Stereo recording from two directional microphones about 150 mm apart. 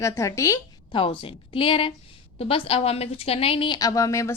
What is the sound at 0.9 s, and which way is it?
Speech, 35° left (ahead or behind).